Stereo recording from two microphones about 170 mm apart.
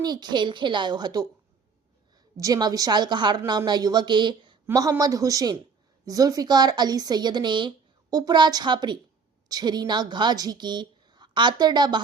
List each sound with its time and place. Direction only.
0.0 s a woman's voice: 25° right (ahead or behind)
2.4 s a woman's voice: 20° right (ahead or behind)